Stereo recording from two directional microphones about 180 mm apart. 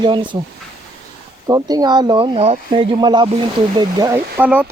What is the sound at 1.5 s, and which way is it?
Speech, 20° right (ahead or behind).